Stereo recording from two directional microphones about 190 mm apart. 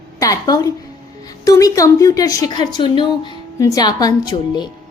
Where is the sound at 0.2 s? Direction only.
20° left (ahead or behind).